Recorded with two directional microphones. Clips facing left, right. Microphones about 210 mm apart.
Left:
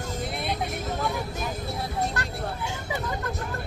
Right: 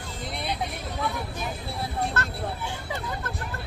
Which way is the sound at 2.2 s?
15° left (ahead or behind).